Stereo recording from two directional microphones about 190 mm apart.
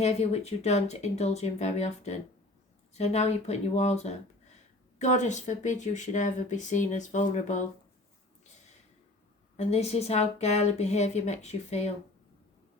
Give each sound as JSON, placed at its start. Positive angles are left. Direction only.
{"t": 0.0, "sound": "speech", "side_deg": 35}
{"t": 9.6, "sound": "speech", "side_deg": 35}